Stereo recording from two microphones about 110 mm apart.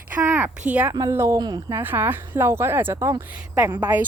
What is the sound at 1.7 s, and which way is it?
Speech, 20° right (ahead or behind).